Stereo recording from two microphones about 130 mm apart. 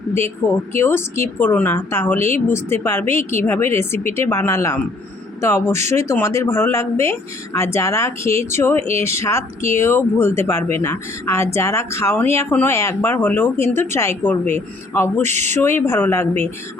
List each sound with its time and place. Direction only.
0.8 s speech: 20° left (ahead or behind)
5.8 s speech: 60° right (ahead or behind)
6.1 s speech: 20° left (ahead or behind)
8.9 s speech: 55° right (ahead or behind)
9.1 s speech: 20° left (ahead or behind)
15.2 s speech: 60° right (ahead or behind)
15.5 s speech: 20° left (ahead or behind)